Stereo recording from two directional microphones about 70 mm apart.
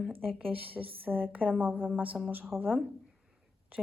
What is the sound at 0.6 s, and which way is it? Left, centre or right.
Speech, right.